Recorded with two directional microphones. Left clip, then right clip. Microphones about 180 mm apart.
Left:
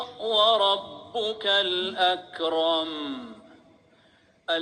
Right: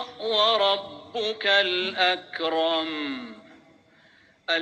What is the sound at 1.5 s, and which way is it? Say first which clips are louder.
Mantra: right 3 dB; 45° right (ahead or behind).